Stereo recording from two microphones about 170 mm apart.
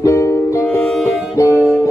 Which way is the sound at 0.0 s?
15° left (ahead or behind).